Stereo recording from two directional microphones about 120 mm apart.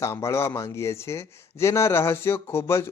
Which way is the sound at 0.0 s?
25° left (ahead or behind).